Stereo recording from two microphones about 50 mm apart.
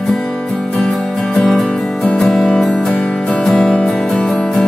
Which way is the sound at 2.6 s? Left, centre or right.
Centre.